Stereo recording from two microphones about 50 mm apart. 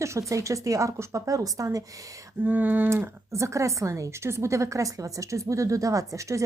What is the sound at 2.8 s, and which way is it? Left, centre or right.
Speech, right.